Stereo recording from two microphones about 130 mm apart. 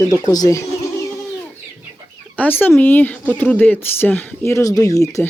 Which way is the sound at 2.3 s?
15° left (ahead or behind).